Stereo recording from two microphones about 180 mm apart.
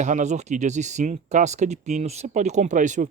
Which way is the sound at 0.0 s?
40° right (ahead or behind).